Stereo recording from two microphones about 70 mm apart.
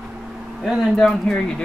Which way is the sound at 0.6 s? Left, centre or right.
Centre.